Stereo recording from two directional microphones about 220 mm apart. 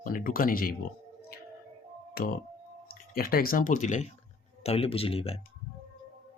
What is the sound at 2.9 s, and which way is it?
Speech, 45° left (ahead or behind).